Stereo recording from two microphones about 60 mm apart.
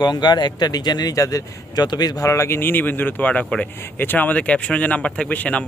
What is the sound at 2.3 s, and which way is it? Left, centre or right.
Speech, left.